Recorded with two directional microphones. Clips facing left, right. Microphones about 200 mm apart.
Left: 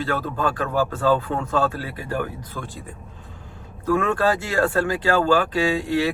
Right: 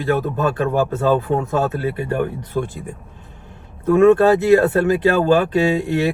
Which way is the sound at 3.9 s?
25° right (ahead or behind).